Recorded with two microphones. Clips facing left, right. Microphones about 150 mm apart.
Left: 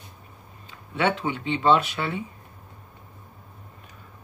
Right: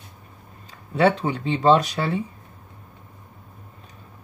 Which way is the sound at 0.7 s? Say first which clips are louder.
Right 5 dB; 35° right (ahead or behind).